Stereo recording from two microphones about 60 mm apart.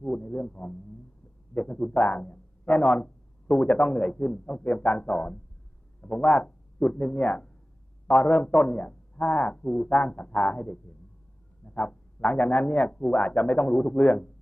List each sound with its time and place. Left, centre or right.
0.0 s a man's voice: left